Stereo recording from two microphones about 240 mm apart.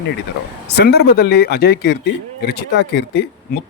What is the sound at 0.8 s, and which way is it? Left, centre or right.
Speech, left.